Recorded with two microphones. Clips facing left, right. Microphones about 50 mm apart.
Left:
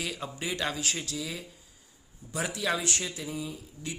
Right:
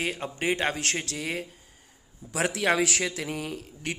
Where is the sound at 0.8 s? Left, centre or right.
Right.